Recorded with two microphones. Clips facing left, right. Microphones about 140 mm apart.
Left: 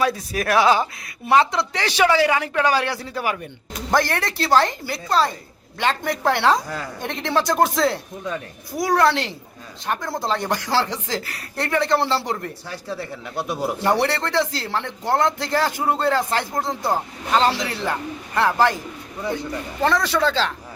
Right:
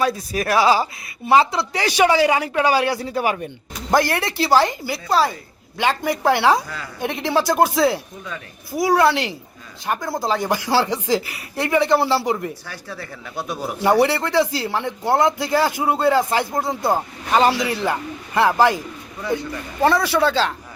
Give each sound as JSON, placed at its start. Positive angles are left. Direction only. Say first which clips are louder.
{"t": 0.0, "sound": "speech", "louder": "right 1 dB", "side_deg": 0}
{"t": 12.6, "sound": "speech", "louder": "left 4 dB", "side_deg": 25}
{"t": 13.8, "sound": "speech", "louder": "right 5 dB", "side_deg": -5}
{"t": 19.8, "sound": "speech", "louder": "right 3 dB", "side_deg": -10}